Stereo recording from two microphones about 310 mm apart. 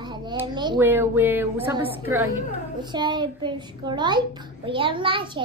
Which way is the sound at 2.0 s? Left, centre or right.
Centre.